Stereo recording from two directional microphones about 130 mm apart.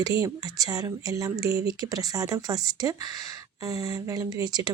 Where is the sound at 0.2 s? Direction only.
30° right (ahead or behind).